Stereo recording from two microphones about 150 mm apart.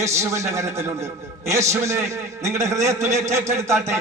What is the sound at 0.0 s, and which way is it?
A man's voice, 20° right (ahead or behind).